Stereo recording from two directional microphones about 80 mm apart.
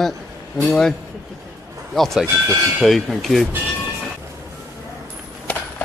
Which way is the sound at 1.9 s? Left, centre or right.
Centre.